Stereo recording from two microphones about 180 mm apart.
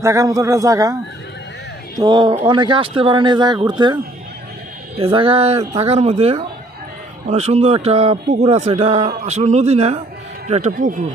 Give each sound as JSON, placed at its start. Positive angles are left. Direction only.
{"t": 0.0, "sound": "a man's voice", "side_deg": -15}
{"t": 2.0, "sound": "speech", "side_deg": -25}